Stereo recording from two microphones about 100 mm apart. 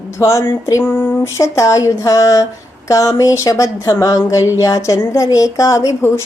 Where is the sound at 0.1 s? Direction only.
30° left (ahead or behind).